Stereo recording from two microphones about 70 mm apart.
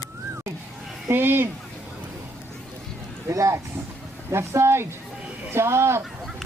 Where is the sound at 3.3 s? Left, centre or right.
Right.